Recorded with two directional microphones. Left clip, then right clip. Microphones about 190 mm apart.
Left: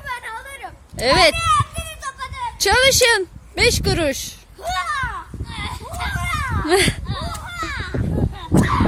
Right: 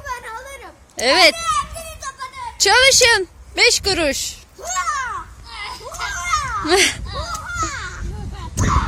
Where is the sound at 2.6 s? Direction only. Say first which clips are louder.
Right 2 dB; 5° left (ahead or behind).